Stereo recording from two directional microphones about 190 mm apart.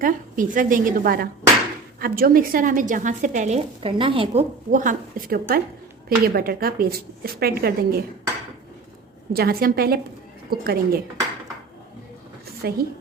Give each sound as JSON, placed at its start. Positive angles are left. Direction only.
{"t": 0.0, "sound": "a woman's voice", "side_deg": -45}
{"t": 4.7, "sound": "a woman's voice", "side_deg": -45}
{"t": 9.3, "sound": "a woman's voice", "side_deg": -55}
{"t": 12.6, "sound": "speech", "side_deg": -55}